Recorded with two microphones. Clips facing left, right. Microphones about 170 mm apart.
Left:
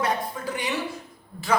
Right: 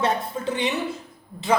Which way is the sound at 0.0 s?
25° right (ahead or behind).